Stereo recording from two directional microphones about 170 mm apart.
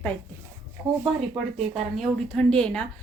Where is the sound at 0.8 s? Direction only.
20° right (ahead or behind).